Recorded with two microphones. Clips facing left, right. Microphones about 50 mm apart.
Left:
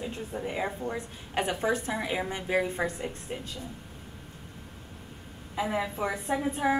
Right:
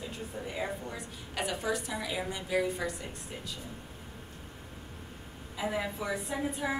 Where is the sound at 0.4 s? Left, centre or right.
Left.